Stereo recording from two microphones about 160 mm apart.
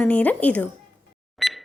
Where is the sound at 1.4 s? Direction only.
Centre (ahead or behind).